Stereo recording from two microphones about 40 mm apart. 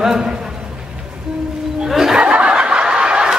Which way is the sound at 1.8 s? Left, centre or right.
Centre.